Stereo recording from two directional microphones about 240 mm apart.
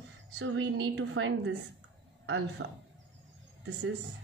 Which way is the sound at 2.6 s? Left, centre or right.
Right.